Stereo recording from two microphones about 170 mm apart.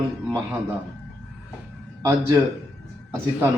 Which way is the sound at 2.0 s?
20° right (ahead or behind).